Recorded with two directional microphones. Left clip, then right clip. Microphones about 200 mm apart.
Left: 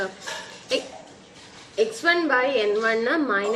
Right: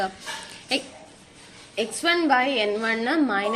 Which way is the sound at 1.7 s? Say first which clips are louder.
Left 2 dB; 40° right (ahead or behind).